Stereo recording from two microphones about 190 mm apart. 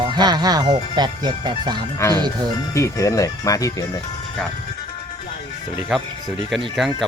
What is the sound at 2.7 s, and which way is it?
Speech, 15° left (ahead or behind).